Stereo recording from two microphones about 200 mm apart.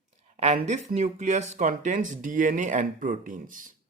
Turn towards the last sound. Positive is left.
turn(degrees=-40)  # may be behind; listen again after turning